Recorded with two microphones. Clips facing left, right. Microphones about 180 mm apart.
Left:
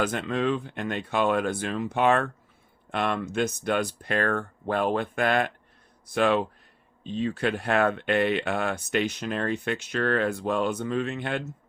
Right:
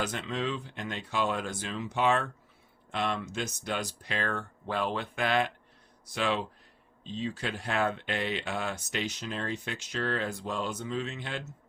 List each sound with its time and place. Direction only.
0.0 s speech: 55° left (ahead or behind)